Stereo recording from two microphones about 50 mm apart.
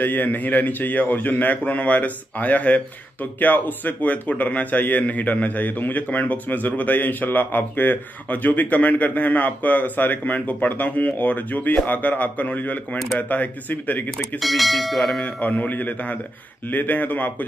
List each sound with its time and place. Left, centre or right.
0.0 s speech: left
14.4 s speech: centre
15.2 s speech: left